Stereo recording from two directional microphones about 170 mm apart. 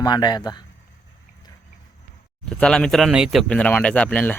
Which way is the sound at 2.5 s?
5° left (ahead or behind).